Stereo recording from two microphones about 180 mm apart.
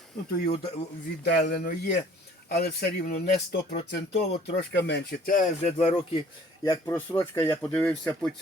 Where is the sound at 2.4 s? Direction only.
60° left (ahead or behind).